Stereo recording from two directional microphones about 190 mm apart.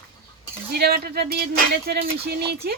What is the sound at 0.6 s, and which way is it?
Speech, 55° right (ahead or behind).